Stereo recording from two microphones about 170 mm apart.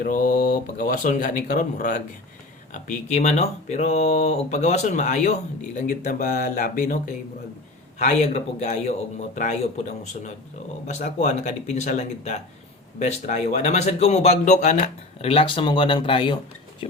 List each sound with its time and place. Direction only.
0.0 s a man's voice: 50° left (ahead or behind)
10.8 s a man's voice: 45° left (ahead or behind)